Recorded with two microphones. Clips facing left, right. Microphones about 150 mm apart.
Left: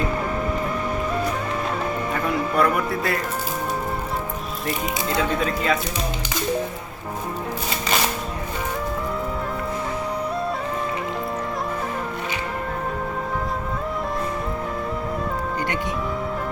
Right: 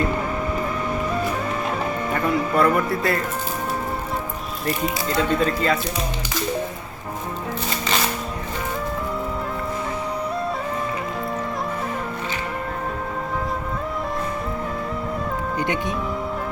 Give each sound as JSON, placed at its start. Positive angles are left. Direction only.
{"t": 2.1, "sound": "speech", "side_deg": 0}
{"t": 4.6, "sound": "speech", "side_deg": 0}
{"t": 15.5, "sound": "music", "side_deg": -20}